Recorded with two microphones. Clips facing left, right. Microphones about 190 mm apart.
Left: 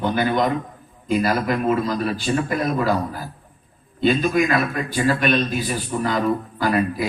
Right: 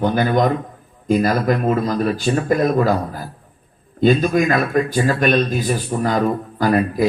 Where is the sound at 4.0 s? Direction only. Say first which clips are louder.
Right 3 dB; 45° right (ahead or behind).